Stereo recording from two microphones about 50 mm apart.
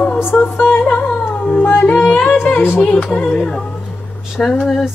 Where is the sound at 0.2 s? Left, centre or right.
Left.